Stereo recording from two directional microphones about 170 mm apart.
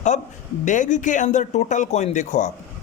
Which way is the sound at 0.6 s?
45° left (ahead or behind).